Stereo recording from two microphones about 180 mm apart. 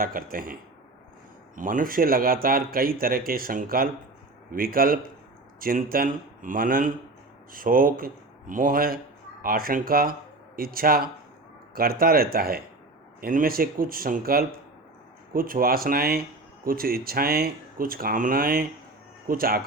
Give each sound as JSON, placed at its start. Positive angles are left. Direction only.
{"t": 0.0, "sound": "speech", "side_deg": -50}
{"t": 1.5, "sound": "speech", "side_deg": -50}